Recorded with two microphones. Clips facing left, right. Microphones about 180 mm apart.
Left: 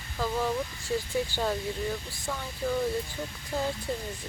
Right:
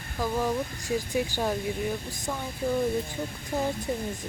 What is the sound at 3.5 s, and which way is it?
Speech, 15° right (ahead or behind).